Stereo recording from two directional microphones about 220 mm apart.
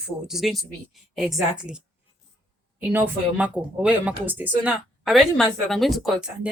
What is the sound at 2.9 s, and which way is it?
Speech, 5° right (ahead or behind).